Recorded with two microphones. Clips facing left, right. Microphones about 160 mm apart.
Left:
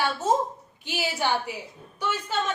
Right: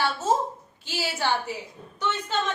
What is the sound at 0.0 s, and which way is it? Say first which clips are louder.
A child's voice: even; 15° left (ahead or behind).